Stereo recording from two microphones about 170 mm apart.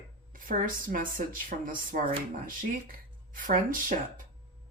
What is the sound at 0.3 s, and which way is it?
Speech, 55° right (ahead or behind).